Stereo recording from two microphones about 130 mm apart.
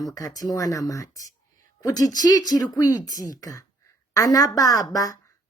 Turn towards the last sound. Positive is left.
turn(degrees=25)  # may be behind; listen again after turning